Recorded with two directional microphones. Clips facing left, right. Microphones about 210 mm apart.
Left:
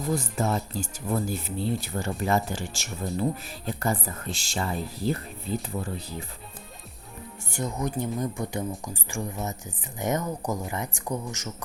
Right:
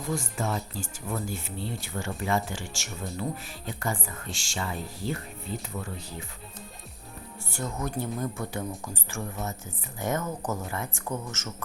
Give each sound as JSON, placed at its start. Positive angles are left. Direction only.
{"t": 0.1, "sound": "speech", "side_deg": 40}
{"t": 7.5, "sound": "speech", "side_deg": 15}